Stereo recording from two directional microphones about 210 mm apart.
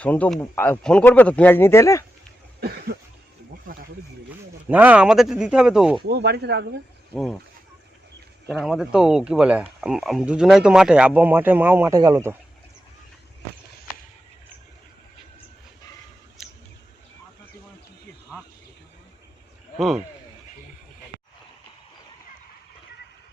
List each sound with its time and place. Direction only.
0.0 s speech: 5° left (ahead or behind)
2.6 s cough: 50° right (ahead or behind)
3.7 s a sound: 40° right (ahead or behind)
4.7 s speech: 5° right (ahead or behind)
6.1 s speech: 50° right (ahead or behind)
7.1 s speech: centre (ahead or behind)
8.4 s speech: centre (ahead or behind)
16.4 s a sound: centre (ahead or behind)